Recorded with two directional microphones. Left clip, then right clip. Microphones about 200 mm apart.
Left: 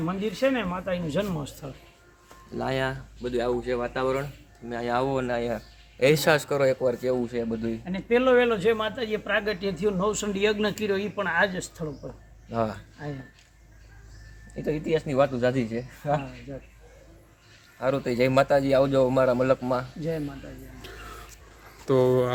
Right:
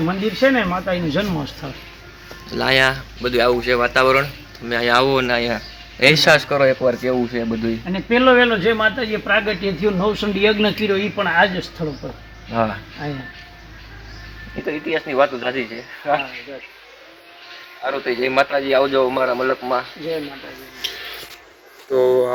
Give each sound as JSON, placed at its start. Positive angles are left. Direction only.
{"t": 0.0, "sound": "speech", "side_deg": 20}
{"t": 3.2, "sound": "speech", "side_deg": 20}
{"t": 4.7, "sound": "speech", "side_deg": 35}
{"t": 7.9, "sound": "speech", "side_deg": 15}
{"t": 12.5, "sound": "speech", "side_deg": 45}
{"t": 14.6, "sound": "speech", "side_deg": 50}
{"t": 17.8, "sound": "speech", "side_deg": 60}
{"t": 19.0, "sound": "speech", "side_deg": 40}
{"t": 20.8, "sound": "music", "side_deg": 40}
{"t": 21.9, "sound": "speech", "side_deg": 10}